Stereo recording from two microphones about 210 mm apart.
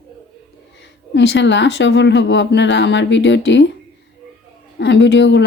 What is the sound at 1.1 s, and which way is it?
A woman's voice, 55° left (ahead or behind).